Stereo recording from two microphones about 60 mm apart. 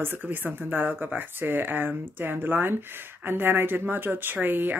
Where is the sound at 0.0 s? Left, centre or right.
Right.